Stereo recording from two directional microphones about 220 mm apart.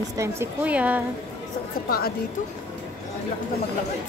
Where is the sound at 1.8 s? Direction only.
45° left (ahead or behind).